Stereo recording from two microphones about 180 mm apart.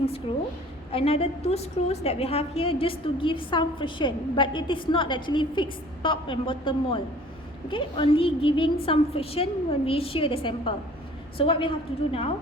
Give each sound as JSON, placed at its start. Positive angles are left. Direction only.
{"t": 0.3, "sound": "a woman's voice", "side_deg": 30}